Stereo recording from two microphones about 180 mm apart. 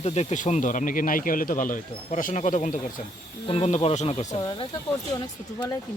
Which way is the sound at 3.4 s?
35° left (ahead or behind).